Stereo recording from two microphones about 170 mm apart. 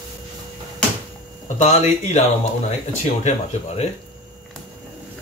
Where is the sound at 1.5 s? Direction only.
40° left (ahead or behind).